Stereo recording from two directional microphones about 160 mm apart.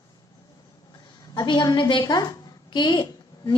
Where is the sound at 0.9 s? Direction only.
25° left (ahead or behind).